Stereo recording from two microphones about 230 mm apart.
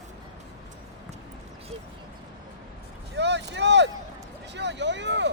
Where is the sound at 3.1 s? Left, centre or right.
Right.